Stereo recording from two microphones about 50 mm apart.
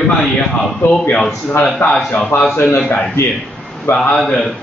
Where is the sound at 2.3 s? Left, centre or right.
Left.